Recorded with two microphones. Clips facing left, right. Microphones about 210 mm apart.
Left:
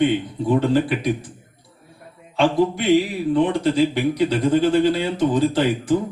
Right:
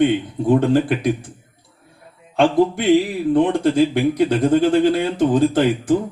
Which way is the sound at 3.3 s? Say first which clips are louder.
Right 3 dB; 50° right (ahead or behind).